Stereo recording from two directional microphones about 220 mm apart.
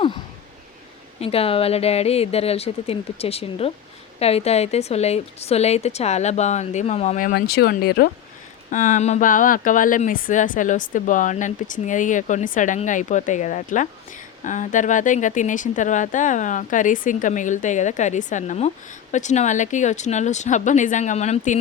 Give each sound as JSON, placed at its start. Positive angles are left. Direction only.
{"t": 1.2, "sound": "a woman's voice", "side_deg": 25}